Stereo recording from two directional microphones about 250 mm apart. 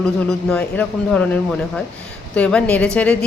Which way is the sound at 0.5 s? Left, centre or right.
Centre.